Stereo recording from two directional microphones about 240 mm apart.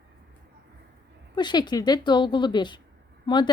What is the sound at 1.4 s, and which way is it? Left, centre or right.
A woman's voice, centre.